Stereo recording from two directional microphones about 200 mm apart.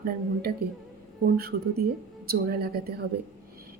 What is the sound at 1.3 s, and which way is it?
A woman's voice, 50° right (ahead or behind).